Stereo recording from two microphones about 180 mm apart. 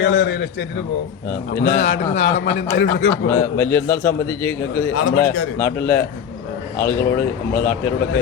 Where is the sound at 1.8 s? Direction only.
85° left.